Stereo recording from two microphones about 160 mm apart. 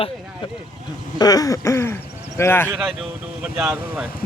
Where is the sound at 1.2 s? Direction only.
25° left (ahead or behind).